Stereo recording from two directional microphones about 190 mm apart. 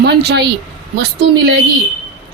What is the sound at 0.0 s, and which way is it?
Speech, 60° right (ahead or behind).